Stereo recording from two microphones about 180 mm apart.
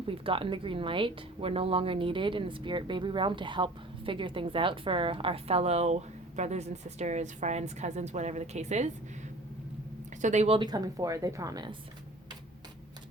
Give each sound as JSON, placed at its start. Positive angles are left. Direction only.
{"t": 0.1, "sound": "a woman's voice", "side_deg": -30}
{"t": 10.2, "sound": "a woman's voice", "side_deg": -40}